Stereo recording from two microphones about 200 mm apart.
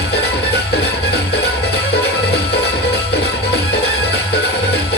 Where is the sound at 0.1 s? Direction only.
55° left (ahead or behind).